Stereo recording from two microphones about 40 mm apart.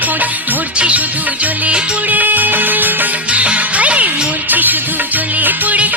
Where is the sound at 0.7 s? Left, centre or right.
Right.